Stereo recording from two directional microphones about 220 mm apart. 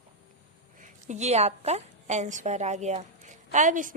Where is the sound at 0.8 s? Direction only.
30° right (ahead or behind).